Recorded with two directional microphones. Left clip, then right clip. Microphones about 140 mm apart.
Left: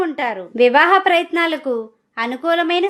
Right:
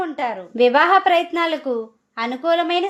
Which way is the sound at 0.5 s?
15° left (ahead or behind).